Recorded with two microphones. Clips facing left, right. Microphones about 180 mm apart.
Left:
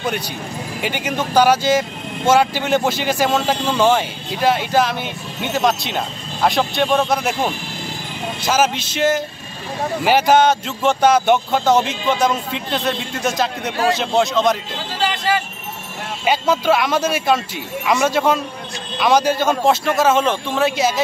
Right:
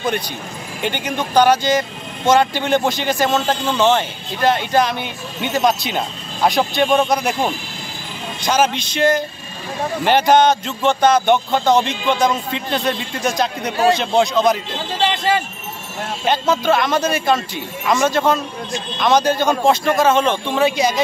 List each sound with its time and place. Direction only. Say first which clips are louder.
0.8 s speech: right 1 dB; 5° left (ahead or behind)
15.0 s vehicle: right 2 dB; 25° right (ahead or behind)
16.3 s speech: even; 10° left (ahead or behind)